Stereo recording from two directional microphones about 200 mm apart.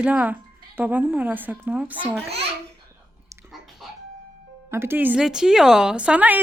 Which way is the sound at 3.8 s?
Centre (ahead or behind).